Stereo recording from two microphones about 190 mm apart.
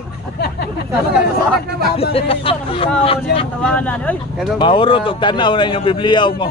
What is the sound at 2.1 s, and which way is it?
Speech, 30° left (ahead or behind).